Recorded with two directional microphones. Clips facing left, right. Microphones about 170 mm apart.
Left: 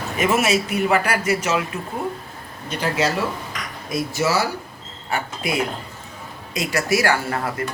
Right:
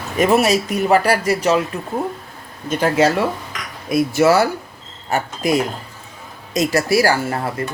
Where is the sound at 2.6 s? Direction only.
50° right (ahead or behind).